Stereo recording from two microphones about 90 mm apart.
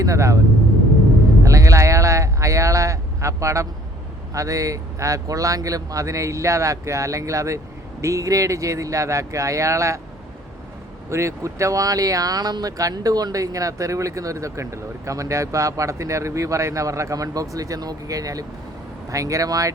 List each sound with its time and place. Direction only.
0.0 s speech: 35° right (ahead or behind)
1.5 s a sound: 35° right (ahead or behind)
4.4 s speech: 40° right (ahead or behind)
11.1 s speech: 35° right (ahead or behind)